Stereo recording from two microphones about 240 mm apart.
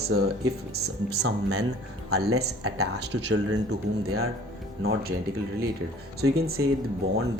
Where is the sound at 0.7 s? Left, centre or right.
Right.